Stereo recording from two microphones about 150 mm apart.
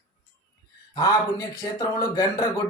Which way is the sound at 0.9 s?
25° left (ahead or behind).